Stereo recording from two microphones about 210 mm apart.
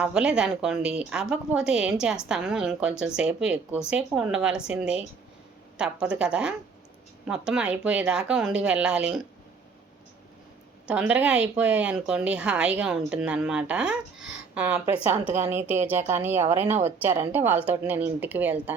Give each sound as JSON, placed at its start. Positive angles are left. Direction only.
{"t": 0.0, "sound": "speech", "side_deg": -5}
{"t": 10.8, "sound": "a woman's voice", "side_deg": -5}